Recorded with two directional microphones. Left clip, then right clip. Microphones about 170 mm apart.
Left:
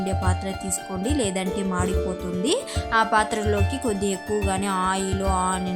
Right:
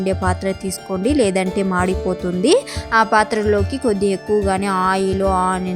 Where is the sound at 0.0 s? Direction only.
35° right (ahead or behind).